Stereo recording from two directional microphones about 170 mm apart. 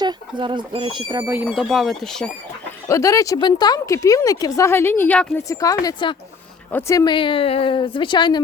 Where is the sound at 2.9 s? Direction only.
20° left (ahead or behind).